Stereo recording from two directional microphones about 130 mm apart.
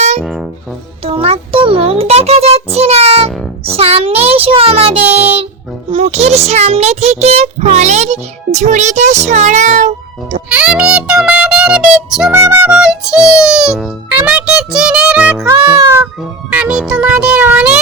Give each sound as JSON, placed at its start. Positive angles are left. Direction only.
{"t": 1.0, "sound": "a child's voice", "side_deg": -50}
{"t": 10.5, "sound": "a child's voice", "side_deg": -10}
{"t": 12.3, "sound": "music", "side_deg": -20}
{"t": 12.7, "sound": "music", "side_deg": -5}
{"t": 13.2, "sound": "a child's voice", "side_deg": -5}